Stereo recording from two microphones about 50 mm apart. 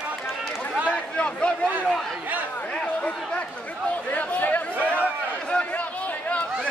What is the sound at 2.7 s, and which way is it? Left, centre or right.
Chatter, left.